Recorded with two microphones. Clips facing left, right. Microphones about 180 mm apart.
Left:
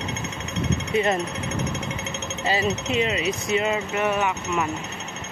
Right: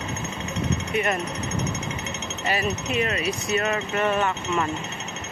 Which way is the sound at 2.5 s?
25° left (ahead or behind).